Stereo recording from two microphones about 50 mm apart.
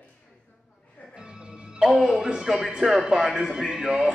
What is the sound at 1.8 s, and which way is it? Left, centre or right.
A man's voice, centre.